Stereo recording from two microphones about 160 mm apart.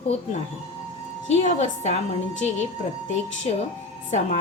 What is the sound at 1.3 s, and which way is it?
Speech, 45° left (ahead or behind).